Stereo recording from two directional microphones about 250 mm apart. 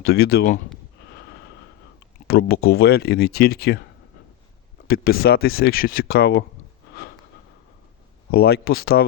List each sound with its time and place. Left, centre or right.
0.0 s speech: left
2.2 s speech: left
4.9 s speech: left
8.3 s speech: left